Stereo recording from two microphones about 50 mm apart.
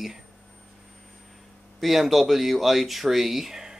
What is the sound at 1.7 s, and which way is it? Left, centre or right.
Speech, centre.